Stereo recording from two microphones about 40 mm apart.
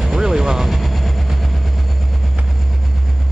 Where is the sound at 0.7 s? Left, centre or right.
Centre.